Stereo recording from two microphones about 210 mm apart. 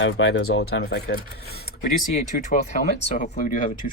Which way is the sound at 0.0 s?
65° left (ahead or behind).